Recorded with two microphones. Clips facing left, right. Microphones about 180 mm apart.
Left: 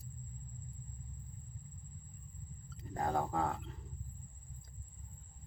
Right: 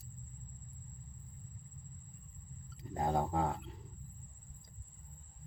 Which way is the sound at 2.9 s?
15° right (ahead or behind).